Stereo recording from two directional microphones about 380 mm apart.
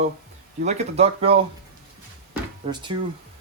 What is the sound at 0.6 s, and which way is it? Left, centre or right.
Speech, centre.